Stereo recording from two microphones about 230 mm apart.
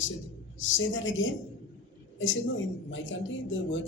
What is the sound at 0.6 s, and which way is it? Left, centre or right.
A man's voice, left.